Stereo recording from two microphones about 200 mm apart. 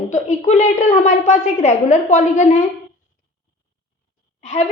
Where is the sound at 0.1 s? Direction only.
35° left (ahead or behind).